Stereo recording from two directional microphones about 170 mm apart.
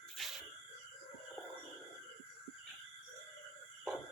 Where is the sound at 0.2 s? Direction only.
Centre (ahead or behind).